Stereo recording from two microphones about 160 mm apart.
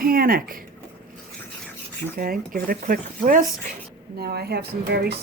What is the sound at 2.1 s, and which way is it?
Speech, 65° right (ahead or behind).